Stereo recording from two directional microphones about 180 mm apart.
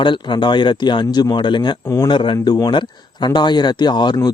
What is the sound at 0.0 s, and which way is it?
Speech, 25° left (ahead or behind).